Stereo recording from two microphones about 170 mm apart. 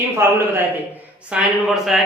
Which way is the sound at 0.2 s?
15° right (ahead or behind).